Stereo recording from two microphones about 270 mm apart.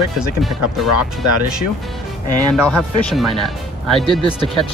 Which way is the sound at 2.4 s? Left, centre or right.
Centre.